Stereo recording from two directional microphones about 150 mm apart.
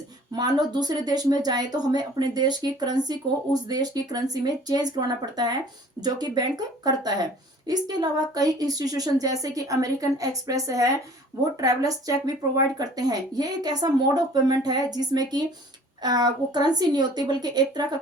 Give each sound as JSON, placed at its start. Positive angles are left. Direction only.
{"t": 0.3, "sound": "speech", "side_deg": -25}